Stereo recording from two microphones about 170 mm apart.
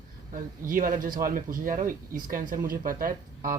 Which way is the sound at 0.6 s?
55° right (ahead or behind).